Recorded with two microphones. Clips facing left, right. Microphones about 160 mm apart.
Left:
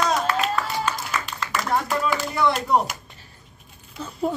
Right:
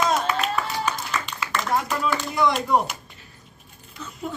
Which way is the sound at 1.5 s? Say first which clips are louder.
Left 1 dB; 5° left (ahead or behind).